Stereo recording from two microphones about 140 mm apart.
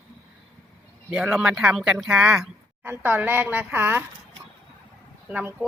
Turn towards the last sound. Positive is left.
turn(degrees=-10)  # may be behind; listen again after turning